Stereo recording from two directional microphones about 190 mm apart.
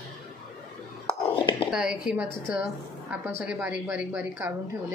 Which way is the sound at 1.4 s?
25° left (ahead or behind).